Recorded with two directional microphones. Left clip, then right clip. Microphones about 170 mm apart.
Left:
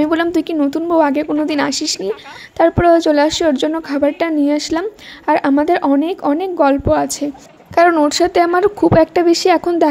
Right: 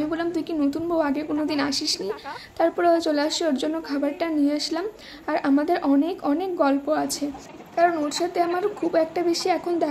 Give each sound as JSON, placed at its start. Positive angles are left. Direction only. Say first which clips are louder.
{"t": 0.0, "sound": "a woman's voice", "louder": "left 11 dB", "side_deg": 50}
{"t": 7.7, "sound": "a woman's voice", "louder": "left 10 dB", "side_deg": 60}